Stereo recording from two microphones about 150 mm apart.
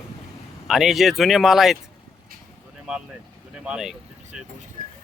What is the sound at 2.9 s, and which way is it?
Speech, 5° right (ahead or behind).